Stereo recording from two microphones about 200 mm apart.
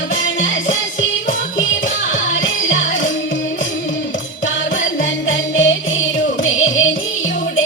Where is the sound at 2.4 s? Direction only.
70° left (ahead or behind).